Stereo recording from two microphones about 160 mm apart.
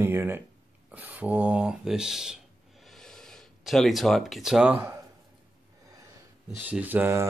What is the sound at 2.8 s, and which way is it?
Gasp, centre (ahead or behind).